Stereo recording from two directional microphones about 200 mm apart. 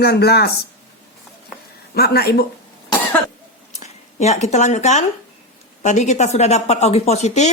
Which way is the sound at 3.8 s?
35° left (ahead or behind).